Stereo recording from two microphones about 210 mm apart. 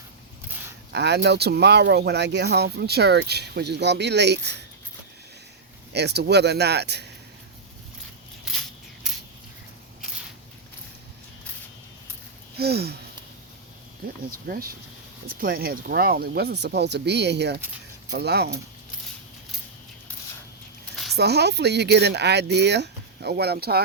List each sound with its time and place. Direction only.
0.9 s speech: 55° right (ahead or behind)
5.9 s speech: 50° right (ahead or behind)
12.5 s a sound: 50° right (ahead or behind)
14.3 s speech: 45° right (ahead or behind)
20.9 s a sound: centre (ahead or behind)
21.2 s speech: 50° right (ahead or behind)